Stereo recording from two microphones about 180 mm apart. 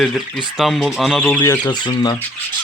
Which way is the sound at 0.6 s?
Centre (ahead or behind).